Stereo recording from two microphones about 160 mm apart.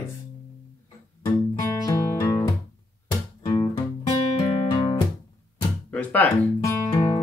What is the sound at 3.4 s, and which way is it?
Music, 35° left (ahead or behind).